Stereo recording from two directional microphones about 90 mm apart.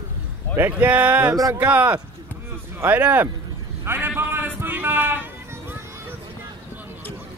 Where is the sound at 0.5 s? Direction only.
20° right (ahead or behind).